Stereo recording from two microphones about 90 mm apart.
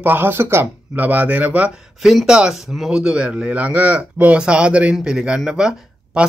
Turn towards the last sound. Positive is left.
turn(degrees=-10)  # may be behind; listen again after turning